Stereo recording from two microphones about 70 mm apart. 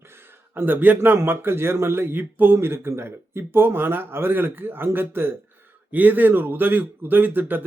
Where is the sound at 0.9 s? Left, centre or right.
Right.